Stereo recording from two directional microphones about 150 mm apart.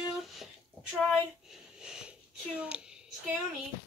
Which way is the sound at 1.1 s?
5° right (ahead or behind).